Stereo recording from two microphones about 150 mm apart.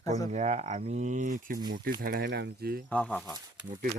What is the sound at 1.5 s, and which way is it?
Speech, 30° right (ahead or behind).